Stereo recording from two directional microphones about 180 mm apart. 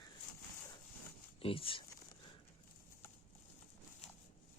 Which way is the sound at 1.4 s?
30° left (ahead or behind).